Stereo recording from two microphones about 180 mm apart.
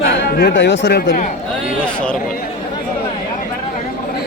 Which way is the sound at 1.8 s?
5° left (ahead or behind).